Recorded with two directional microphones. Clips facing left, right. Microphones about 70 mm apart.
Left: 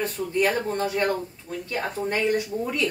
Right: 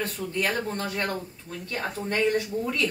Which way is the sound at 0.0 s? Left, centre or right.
Left.